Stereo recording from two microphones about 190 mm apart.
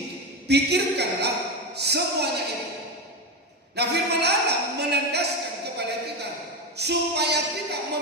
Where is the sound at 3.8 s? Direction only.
60° right (ahead or behind).